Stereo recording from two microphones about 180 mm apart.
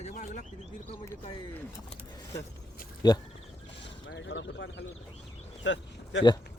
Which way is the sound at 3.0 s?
25° left (ahead or behind).